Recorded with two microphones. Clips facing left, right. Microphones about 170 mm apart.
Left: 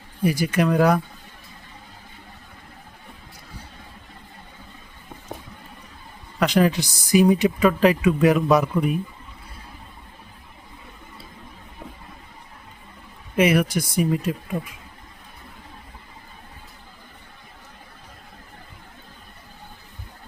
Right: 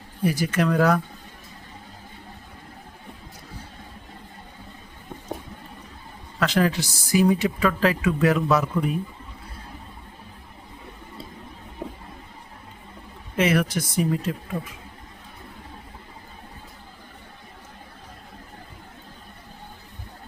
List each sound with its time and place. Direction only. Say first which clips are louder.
0.2 s speech: left 2 dB; 10° left (ahead or behind)
6.4 s speech: left 3 dB; 15° left (ahead or behind)
11.8 s vehicle: right 6 dB; 40° right (ahead or behind)
13.3 s speech: left 3 dB; 15° left (ahead or behind)